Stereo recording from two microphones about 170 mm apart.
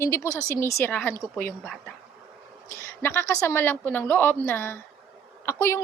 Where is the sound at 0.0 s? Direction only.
15° left (ahead or behind).